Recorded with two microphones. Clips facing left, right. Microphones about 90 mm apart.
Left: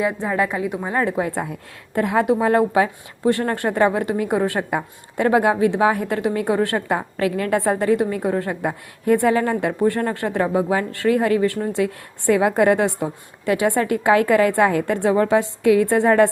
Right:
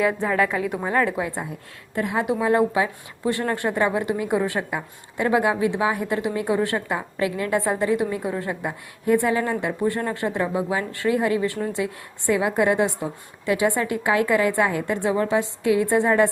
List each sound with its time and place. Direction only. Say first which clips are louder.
0.0 s a woman's voice: even; 15° left (ahead or behind)
2.0 s a woman's voice: left 5 dB; 55° left (ahead or behind)